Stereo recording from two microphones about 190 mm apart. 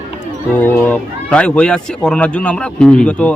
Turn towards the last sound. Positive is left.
turn(degrees=5)  # may be behind; listen again after turning